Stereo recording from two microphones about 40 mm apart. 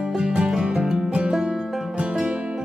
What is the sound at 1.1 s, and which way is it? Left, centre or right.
Music, right.